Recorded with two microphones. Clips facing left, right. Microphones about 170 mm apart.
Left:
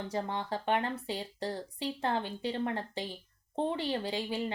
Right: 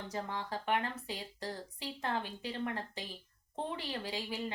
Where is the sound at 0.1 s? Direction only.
30° left (ahead or behind).